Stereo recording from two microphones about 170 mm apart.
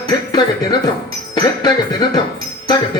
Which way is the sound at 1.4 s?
25° left (ahead or behind).